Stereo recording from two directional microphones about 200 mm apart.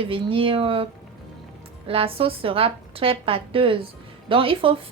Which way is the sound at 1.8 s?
25° right (ahead or behind).